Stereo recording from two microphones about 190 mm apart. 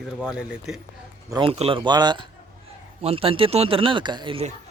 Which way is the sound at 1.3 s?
30° right (ahead or behind).